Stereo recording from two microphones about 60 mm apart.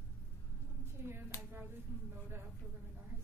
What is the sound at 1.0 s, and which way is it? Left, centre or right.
Speech, right.